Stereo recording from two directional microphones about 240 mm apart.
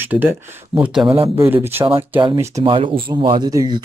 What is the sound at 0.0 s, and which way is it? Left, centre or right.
Speech, centre.